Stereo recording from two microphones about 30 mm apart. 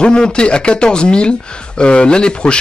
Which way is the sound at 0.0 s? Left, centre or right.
Left.